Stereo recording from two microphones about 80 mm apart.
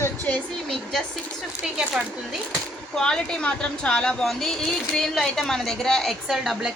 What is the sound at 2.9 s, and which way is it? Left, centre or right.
A woman's voice, centre.